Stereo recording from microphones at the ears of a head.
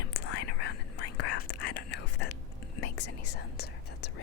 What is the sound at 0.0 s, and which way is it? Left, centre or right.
Whispering, left.